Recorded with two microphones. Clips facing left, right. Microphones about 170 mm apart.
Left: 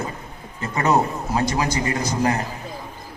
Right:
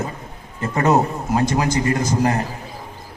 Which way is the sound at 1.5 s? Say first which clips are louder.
Right 4 dB; 50° right (ahead or behind).